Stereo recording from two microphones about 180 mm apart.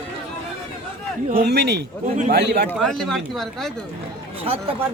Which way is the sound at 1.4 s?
70° right (ahead or behind).